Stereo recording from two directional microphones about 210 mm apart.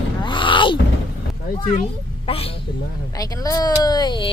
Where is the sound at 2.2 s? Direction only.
25° left (ahead or behind).